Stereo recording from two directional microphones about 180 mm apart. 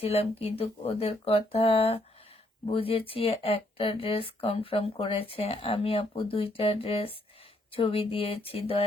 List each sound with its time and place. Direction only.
0.0 s speech: 35° left (ahead or behind)